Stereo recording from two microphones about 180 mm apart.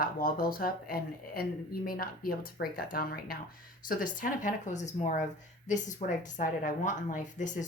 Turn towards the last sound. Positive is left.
turn(degrees=45)  # may be behind; listen again after turning